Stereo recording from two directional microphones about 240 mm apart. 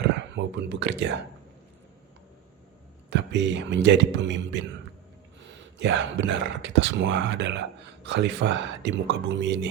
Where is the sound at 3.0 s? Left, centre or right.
Right.